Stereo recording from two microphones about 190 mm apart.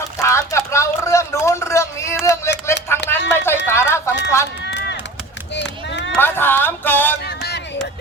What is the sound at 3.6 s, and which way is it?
Clip-clop, 15° left (ahead or behind).